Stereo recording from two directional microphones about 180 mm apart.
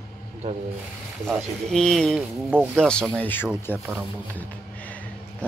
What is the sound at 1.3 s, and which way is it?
Speech, centre (ahead or behind).